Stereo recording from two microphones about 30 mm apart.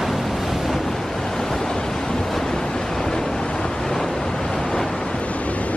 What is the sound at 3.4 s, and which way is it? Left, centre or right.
Vehicle, left.